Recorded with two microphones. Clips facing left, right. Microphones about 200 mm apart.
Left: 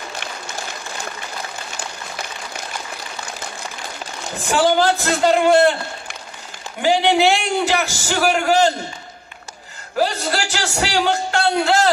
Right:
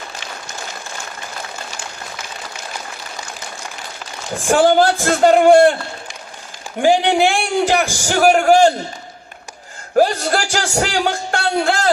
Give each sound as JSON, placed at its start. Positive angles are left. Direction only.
{"t": 4.4, "sound": "a man's voice", "side_deg": -45}
{"t": 6.8, "sound": "a man's voice", "side_deg": -50}
{"t": 9.9, "sound": "a man's voice", "side_deg": -45}